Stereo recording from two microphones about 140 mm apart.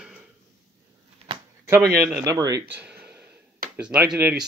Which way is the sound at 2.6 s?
10° right (ahead or behind).